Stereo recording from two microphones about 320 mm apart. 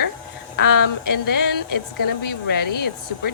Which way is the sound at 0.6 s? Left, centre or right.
Left.